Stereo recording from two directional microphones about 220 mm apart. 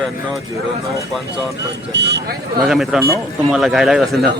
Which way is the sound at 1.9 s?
50° right (ahead or behind).